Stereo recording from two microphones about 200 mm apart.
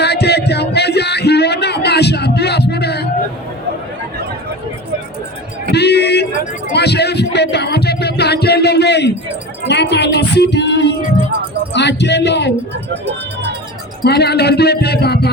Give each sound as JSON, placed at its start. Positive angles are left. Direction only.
{"t": 0.0, "sound": "music", "side_deg": 55}
{"t": 5.7, "sound": "a sound", "side_deg": 55}
{"t": 6.7, "sound": "music", "side_deg": 55}
{"t": 9.6, "sound": "speech", "side_deg": 60}
{"t": 14.0, "sound": "speech", "side_deg": 55}